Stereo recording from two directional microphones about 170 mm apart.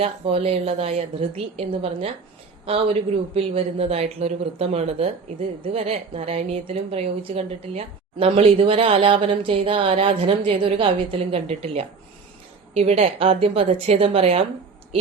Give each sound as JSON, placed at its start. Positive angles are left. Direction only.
{"t": 0.0, "sound": "a woman's voice", "side_deg": -35}